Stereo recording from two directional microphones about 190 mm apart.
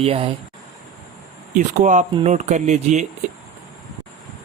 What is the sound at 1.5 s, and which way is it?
Speech, 40° right (ahead or behind).